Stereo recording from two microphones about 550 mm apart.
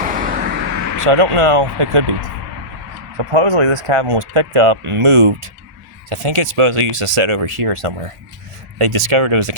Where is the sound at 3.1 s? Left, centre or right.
Right.